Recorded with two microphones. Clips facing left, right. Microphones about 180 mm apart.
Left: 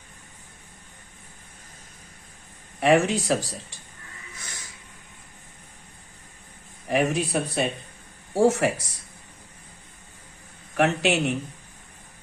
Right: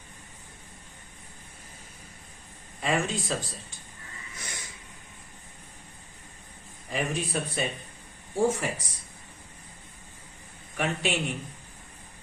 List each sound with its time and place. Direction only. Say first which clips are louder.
2.8 s speech: left 9 dB; 85° left
6.8 s speech: left 7 dB; 75° left (ahead or behind)
10.8 s speech: left 7 dB; 75° left (ahead or behind)